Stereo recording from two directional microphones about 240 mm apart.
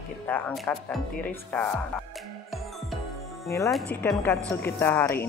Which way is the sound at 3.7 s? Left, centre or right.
Centre.